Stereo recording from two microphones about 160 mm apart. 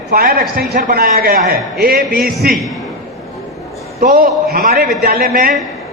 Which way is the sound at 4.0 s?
65° right (ahead or behind).